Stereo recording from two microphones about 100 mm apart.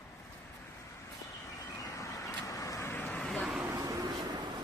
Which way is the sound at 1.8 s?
30° left (ahead or behind).